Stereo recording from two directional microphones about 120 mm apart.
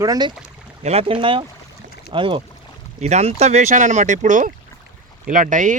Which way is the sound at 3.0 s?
65° right (ahead or behind).